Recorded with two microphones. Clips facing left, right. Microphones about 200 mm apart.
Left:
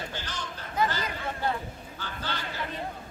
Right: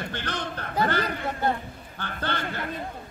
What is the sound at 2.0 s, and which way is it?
Speech, 60° right (ahead or behind).